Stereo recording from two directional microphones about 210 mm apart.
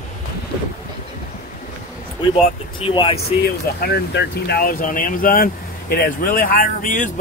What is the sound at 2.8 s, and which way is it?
Speech, 25° left (ahead or behind).